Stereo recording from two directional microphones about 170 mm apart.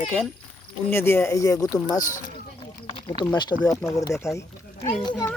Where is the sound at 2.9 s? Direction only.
30° left (ahead or behind).